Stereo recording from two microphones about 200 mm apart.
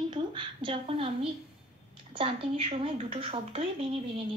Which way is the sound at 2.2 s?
25° right (ahead or behind).